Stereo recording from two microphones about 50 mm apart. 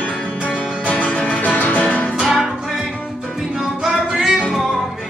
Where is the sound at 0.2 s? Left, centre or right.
Left.